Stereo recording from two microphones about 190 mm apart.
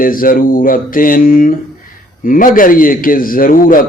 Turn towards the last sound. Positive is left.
turn(degrees=45)  # may be behind; listen again after turning